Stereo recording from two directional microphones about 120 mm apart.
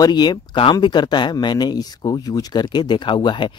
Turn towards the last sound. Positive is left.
turn(degrees=40)  # may be behind; listen again after turning